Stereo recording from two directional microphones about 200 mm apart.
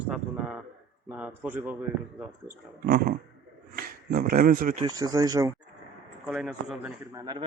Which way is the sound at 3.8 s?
45° right (ahead or behind).